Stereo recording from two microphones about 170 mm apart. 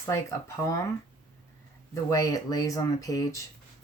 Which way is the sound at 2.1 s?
20° left (ahead or behind).